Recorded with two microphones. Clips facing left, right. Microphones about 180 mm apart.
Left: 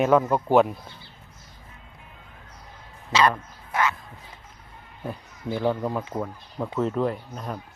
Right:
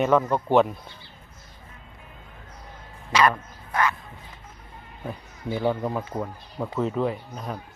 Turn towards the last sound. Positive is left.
turn(degrees=0)  # may be behind; listen again after turning